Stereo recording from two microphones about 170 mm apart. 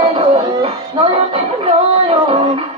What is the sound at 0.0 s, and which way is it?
Music, 35° right (ahead or behind).